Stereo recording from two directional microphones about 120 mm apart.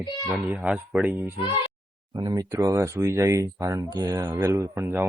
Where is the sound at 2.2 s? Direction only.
35° right (ahead or behind).